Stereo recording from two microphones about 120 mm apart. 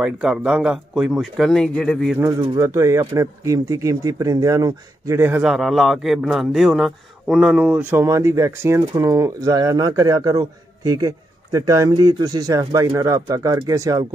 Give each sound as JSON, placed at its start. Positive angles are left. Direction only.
{"t": 0.0, "sound": "a man's voice", "side_deg": -5}
{"t": 2.1, "sound": "speech", "side_deg": -25}
{"t": 5.4, "sound": "a man's voice", "side_deg": -5}
{"t": 7.7, "sound": "speech", "side_deg": -15}